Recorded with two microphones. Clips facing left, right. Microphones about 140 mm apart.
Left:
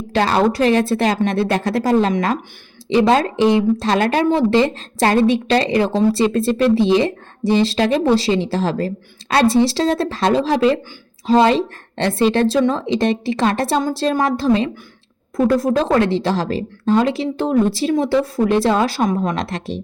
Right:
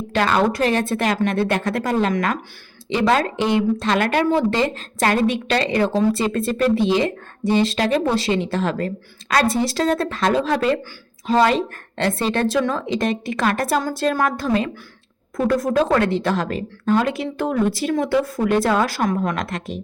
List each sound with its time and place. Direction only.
0.1 s speech: 35° left (ahead or behind)